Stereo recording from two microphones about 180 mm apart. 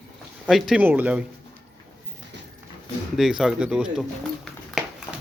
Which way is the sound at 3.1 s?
Centre (ahead or behind).